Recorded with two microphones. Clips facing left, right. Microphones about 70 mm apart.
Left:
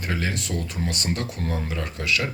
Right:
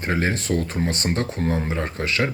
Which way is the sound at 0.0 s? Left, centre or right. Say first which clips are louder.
Right 5 dB; right.